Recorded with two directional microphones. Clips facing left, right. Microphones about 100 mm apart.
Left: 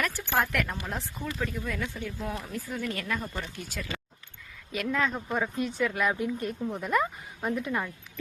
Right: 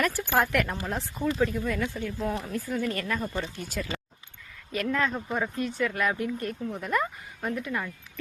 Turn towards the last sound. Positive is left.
turn(degrees=15)  # may be behind; listen again after turning